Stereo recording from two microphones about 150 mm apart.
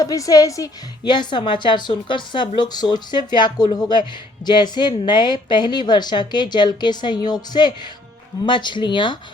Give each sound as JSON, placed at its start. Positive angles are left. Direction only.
{"t": 0.0, "sound": "a woman's voice", "side_deg": 25}